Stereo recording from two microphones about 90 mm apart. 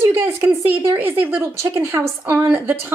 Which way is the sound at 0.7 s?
25° right (ahead or behind).